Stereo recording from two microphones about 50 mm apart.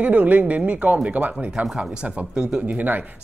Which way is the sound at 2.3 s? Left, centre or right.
Centre.